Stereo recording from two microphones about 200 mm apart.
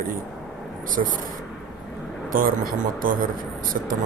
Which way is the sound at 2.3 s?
45° right (ahead or behind).